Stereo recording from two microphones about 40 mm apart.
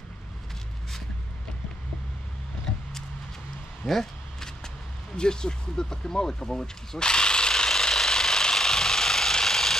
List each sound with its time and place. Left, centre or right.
3.8 s a sound: centre
5.1 s speech: centre
7.0 s jackhammer: left